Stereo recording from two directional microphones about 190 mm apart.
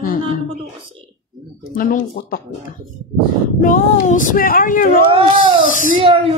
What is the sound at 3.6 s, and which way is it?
Speech, 45° left (ahead or behind).